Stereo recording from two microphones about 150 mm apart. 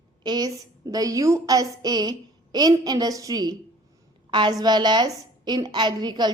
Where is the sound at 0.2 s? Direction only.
30° right (ahead or behind).